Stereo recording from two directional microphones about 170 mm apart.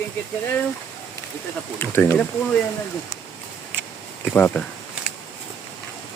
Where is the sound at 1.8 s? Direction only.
15° left (ahead or behind).